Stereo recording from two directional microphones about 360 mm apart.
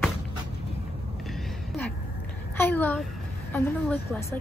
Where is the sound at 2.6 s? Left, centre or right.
Centre.